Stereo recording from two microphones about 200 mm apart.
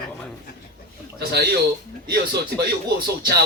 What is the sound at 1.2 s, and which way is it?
A man's voice, 50° right (ahead or behind).